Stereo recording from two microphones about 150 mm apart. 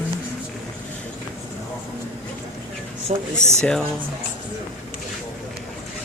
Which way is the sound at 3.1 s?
50° right (ahead or behind).